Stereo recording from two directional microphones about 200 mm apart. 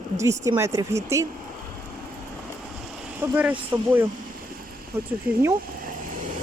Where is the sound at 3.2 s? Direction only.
5° right (ahead or behind).